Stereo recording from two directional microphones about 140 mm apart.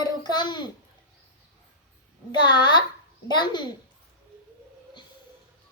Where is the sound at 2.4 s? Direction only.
30° left (ahead or behind).